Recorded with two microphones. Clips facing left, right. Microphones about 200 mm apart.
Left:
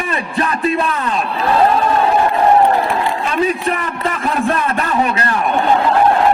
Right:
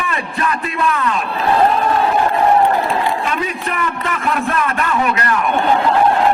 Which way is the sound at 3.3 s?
30° left (ahead or behind).